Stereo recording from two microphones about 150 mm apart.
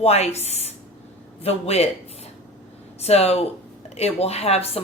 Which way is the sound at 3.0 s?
45° left (ahead or behind).